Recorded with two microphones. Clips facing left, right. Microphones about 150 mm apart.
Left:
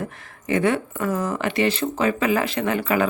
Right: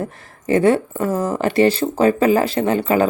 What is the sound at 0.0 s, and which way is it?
Speech, 35° right (ahead or behind).